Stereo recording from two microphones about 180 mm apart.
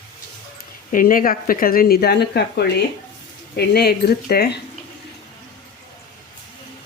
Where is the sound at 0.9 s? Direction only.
50° left (ahead or behind).